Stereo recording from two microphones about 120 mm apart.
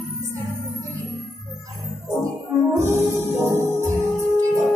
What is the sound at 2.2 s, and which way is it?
Music, 20° right (ahead or behind).